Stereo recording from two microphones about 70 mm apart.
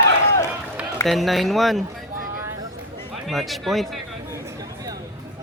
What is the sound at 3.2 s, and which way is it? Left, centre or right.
Speech, centre.